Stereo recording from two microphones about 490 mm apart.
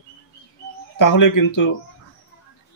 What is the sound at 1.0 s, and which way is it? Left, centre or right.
Speech, left.